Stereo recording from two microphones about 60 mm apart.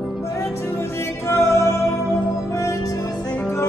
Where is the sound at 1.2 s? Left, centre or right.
Left.